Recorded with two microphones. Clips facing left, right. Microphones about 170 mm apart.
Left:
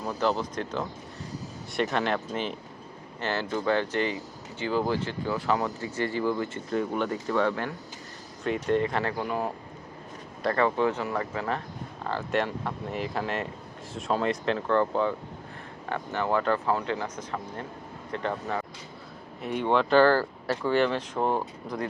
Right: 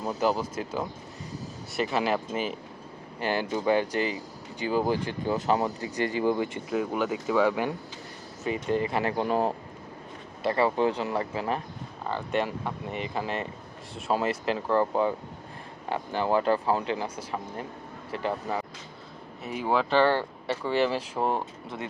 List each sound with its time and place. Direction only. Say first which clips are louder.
0.0 s speech: right 1 dB; 15° right (ahead or behind)
6.7 s speech: even; 5° right (ahead or behind)
9.1 s speech: right 4 dB; 30° right (ahead or behind)
10.9 s speech: right 1 dB; 15° right (ahead or behind)
12.0 s speech: even; centre (ahead or behind)
16.2 s speech: right 2 dB; 15° right (ahead or behind)